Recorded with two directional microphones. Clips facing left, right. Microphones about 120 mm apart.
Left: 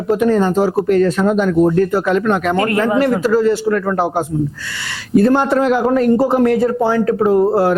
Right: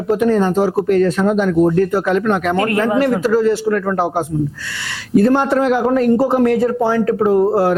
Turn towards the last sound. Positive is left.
turn(degrees=30)  # may be behind; listen again after turning